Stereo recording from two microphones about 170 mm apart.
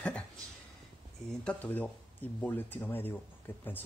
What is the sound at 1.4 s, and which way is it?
Speech, 10° left (ahead or behind).